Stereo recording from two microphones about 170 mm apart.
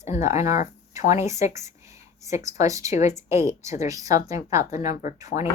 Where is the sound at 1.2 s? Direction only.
15° right (ahead or behind).